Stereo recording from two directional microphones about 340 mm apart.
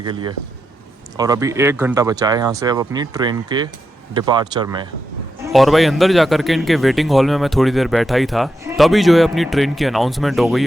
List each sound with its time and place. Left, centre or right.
0.0 s speech: centre
5.5 s speech: centre